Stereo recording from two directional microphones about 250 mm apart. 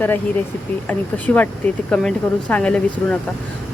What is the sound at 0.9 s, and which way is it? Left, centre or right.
Speech, centre.